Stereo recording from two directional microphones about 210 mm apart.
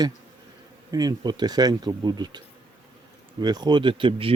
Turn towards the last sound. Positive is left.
turn(degrees=-25)  # may be behind; listen again after turning